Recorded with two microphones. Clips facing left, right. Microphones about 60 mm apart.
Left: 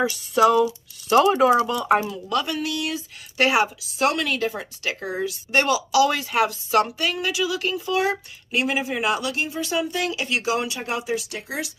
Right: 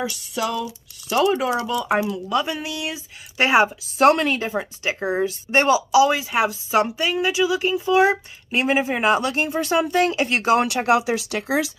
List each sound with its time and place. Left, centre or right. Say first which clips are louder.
0.0 s speech: left 7 dB; centre
2.3 s a woman's voice: left 1 dB; centre
4.0 s speech: right 6 dB; right
4.3 s a woman's voice: right 2 dB; right
10.9 s speech: right 7 dB; right